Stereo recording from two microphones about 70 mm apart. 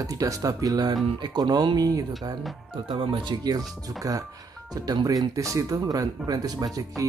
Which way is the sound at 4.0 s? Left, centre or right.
Right.